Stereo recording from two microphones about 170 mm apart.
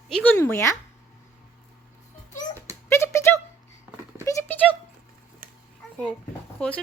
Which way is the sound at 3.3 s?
10° left (ahead or behind).